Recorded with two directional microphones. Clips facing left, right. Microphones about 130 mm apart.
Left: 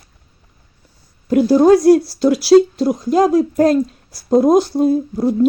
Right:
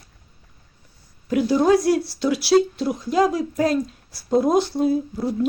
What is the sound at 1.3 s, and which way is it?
Speech, 40° left (ahead or behind).